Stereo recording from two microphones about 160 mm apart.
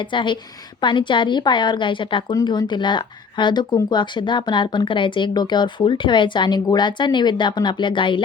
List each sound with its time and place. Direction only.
0.1 s a woman's voice: 30° left (ahead or behind)